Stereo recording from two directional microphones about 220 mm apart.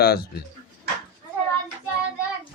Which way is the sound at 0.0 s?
45° left (ahead or behind).